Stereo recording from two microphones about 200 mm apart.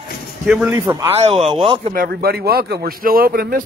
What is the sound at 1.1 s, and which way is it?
Speech, 30° right (ahead or behind).